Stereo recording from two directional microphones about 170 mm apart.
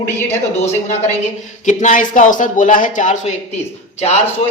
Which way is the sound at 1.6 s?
45° left (ahead or behind).